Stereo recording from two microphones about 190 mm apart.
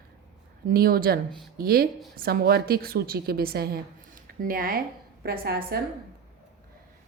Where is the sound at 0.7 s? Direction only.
50° right (ahead or behind).